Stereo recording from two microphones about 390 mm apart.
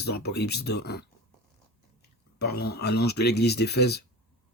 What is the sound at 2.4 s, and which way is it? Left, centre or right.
Speech, left.